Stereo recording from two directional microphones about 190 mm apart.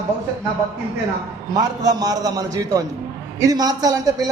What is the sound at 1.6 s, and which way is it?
A man's voice, 20° right (ahead or behind).